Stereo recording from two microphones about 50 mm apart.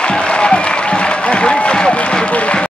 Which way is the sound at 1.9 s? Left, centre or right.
Left.